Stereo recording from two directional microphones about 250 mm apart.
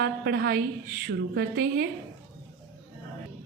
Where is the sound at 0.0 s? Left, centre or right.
Right.